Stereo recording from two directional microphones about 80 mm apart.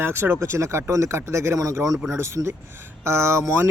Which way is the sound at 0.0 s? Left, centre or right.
Right.